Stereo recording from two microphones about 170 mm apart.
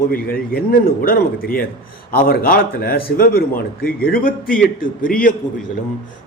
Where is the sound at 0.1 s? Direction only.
60° left (ahead or behind).